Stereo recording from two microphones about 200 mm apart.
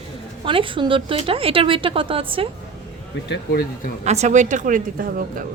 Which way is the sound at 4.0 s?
35° right (ahead or behind).